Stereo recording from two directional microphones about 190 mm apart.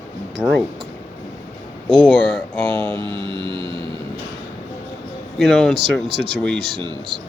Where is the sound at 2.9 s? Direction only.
25° right (ahead or behind).